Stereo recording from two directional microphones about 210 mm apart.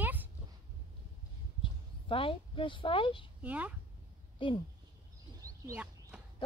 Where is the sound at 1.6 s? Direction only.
25° left (ahead or behind).